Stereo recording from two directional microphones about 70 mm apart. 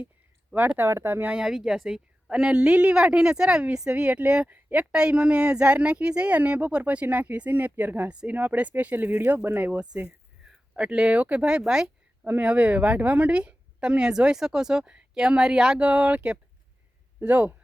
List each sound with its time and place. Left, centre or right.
0.5 s speech: right
1.3 s a woman's voice: centre; by 9.8 s right
9.9 s a woman's voice: centre